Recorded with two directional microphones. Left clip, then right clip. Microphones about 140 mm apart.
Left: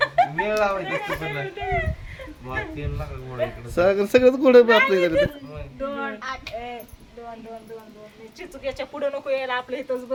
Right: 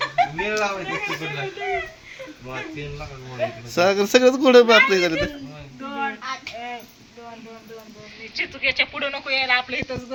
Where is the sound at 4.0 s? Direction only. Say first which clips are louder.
Right 1 dB; 10° left (ahead or behind).